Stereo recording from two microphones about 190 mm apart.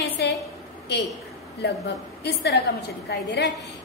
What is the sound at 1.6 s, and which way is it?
A woman's voice, 65° left (ahead or behind).